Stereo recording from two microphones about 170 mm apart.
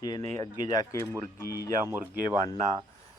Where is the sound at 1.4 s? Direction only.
65° left (ahead or behind).